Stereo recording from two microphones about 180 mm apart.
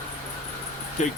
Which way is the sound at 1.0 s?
40° left (ahead or behind).